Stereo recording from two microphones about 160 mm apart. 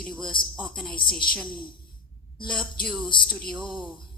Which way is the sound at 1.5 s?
30° left (ahead or behind).